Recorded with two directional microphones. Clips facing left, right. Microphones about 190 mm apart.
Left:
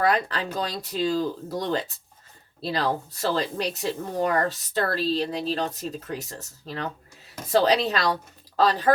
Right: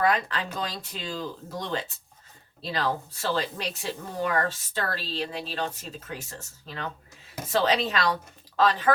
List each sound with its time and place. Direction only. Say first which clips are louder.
0.0 s speech: left 2 dB; 35° left (ahead or behind)